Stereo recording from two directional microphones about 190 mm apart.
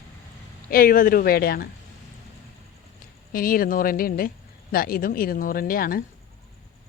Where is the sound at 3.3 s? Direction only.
50° left (ahead or behind).